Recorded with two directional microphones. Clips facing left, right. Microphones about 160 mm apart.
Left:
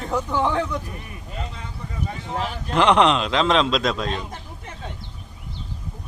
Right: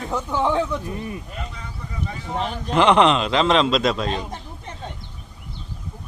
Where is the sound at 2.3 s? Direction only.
Centre (ahead or behind).